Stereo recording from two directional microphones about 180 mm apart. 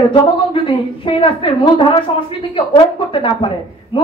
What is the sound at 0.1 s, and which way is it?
A woman's voice, 25° left (ahead or behind).